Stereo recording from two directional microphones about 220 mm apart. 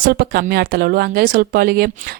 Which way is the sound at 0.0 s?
45° right (ahead or behind).